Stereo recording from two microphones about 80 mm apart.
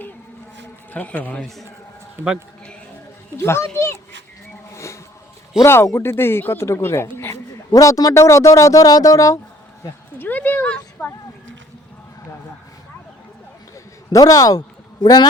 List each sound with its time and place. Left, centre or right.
0.9 s a man's voice: centre
2.2 s a man's voice: right
3.3 s speech: left
4.7 s a sound: left
5.6 s speech: left
7.7 s speech: left
10.2 s a sound: left
14.1 s speech: left